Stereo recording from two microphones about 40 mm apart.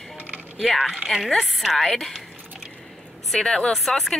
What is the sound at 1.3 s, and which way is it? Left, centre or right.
Speech, centre.